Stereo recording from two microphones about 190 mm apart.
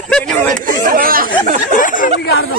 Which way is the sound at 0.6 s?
45° right (ahead or behind).